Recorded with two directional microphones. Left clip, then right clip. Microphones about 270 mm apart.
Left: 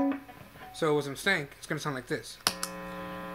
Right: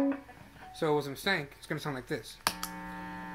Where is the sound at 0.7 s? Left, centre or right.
Centre.